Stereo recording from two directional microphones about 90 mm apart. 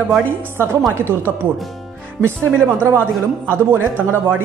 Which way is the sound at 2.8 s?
25° right (ahead or behind).